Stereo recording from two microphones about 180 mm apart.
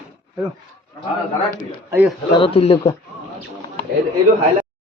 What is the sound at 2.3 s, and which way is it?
Speech, 30° left (ahead or behind).